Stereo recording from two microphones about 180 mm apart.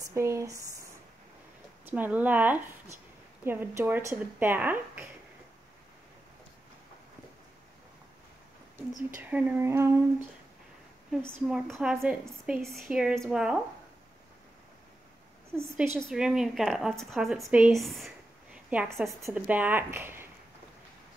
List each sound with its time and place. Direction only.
0.0 s a sound: 15° right (ahead or behind)
1.9 s a woman's voice: 10° right (ahead or behind)
9.3 s a woman's voice: 10° right (ahead or behind)
11.1 s a woman's voice: centre (ahead or behind)
16.0 s a woman's voice: centre (ahead or behind)